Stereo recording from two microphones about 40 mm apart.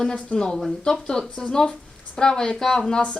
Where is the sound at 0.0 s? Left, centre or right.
Left.